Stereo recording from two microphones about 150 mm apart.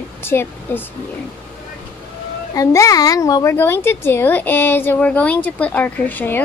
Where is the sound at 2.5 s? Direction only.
20° left (ahead or behind).